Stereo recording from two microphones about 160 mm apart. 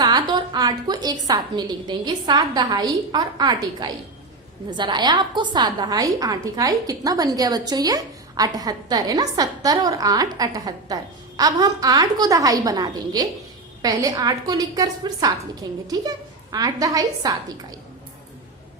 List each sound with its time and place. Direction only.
0.0 s a woman's voice: 25° right (ahead or behind)
16.5 s a woman's voice: 25° right (ahead or behind)